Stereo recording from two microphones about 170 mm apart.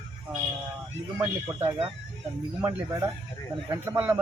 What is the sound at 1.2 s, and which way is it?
Speech, 10° right (ahead or behind).